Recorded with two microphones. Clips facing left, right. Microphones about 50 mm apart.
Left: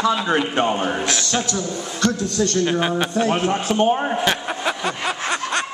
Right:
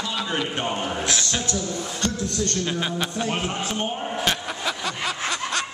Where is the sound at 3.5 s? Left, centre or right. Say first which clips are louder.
Left 9 dB; left.